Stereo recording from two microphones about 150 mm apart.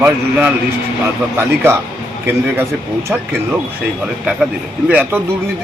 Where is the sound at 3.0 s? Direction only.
10° right (ahead or behind).